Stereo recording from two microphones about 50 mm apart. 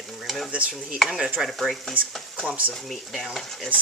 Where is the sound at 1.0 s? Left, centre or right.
Centre.